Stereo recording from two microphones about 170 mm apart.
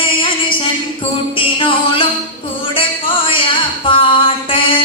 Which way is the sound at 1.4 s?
30° left (ahead or behind).